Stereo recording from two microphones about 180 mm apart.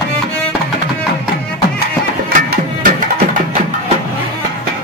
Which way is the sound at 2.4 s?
50° right (ahead or behind).